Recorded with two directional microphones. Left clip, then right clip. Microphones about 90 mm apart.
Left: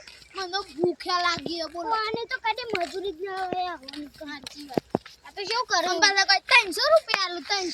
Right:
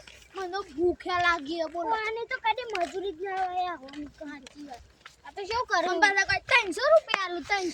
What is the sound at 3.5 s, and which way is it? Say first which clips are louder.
Speech: left 1 dB; 20° left (ahead or behind).